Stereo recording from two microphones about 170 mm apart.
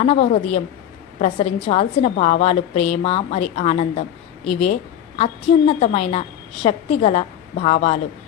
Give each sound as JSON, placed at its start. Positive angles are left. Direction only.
{"t": 0.0, "sound": "a woman's voice", "side_deg": 40}